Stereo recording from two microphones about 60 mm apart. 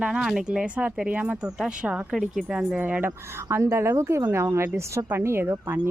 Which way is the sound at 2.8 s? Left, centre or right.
Right.